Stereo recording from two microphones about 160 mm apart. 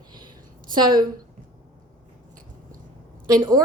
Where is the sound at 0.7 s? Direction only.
30° right (ahead or behind).